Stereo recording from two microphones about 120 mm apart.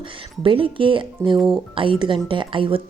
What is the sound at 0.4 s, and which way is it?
A woman's voice, 45° right (ahead or behind).